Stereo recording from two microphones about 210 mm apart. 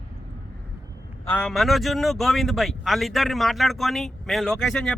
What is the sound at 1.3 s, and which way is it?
Speech, 5° left (ahead or behind).